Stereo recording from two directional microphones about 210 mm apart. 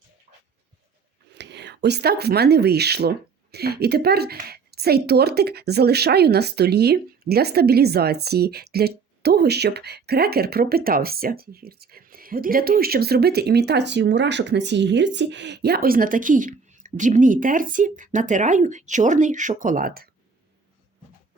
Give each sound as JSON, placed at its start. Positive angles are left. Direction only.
{"t": 1.3, "sound": "a woman's voice", "side_deg": -55}